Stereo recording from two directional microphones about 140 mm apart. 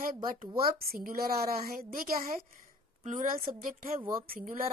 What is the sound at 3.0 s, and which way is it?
Speech, 65° right (ahead or behind).